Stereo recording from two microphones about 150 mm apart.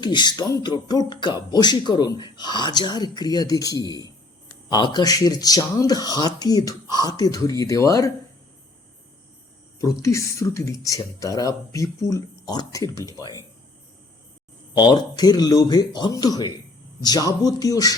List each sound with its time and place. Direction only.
0.0 s speech: 30° left (ahead or behind)
9.8 s speech: 20° left (ahead or behind)
14.8 s speech: 30° left (ahead or behind)